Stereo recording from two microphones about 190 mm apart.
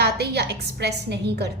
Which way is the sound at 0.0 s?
60° right (ahead or behind).